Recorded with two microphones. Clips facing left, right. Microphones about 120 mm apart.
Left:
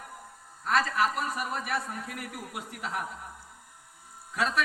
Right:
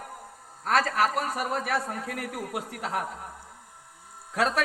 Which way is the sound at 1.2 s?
70° right (ahead or behind).